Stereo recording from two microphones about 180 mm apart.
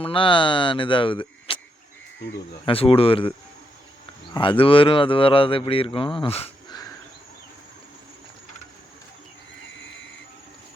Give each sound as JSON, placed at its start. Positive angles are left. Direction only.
{"t": 0.0, "sound": "a man's voice", "side_deg": 30}
{"t": 2.6, "sound": "speech", "side_deg": 30}
{"t": 4.4, "sound": "a man's voice", "side_deg": 30}